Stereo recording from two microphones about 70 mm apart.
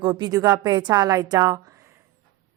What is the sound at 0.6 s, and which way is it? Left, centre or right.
A woman's voice, right.